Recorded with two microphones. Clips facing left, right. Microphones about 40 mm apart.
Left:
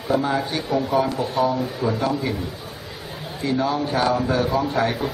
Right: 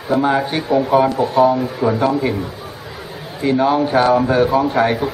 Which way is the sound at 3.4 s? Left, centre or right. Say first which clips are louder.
Right 7 dB; right.